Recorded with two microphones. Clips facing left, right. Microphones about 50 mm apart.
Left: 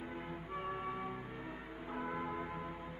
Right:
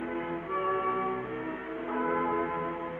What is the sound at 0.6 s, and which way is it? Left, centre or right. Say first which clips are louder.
Music: right 12 dB; right.